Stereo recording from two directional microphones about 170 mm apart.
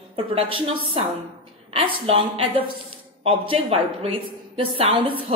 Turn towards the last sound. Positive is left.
turn(degrees=-30)  # may be behind; listen again after turning